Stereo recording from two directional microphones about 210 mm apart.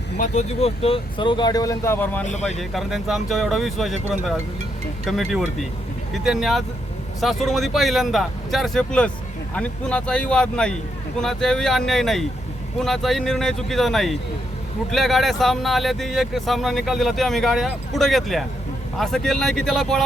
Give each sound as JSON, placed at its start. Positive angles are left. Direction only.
{"t": 0.2, "sound": "speech", "side_deg": 30}
{"t": 2.2, "sound": "speech", "side_deg": 35}
{"t": 2.6, "sound": "speech", "side_deg": 0}